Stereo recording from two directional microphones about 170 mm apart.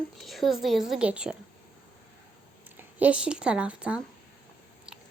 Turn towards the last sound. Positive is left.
turn(degrees=-5)  # may be behind; listen again after turning